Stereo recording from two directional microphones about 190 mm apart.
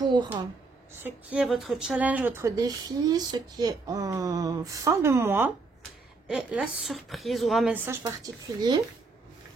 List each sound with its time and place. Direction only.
0.0 s a sound: 25° right (ahead or behind)
1.0 s a woman's voice: 5° right (ahead or behind)
8.0 s speech: 20° right (ahead or behind)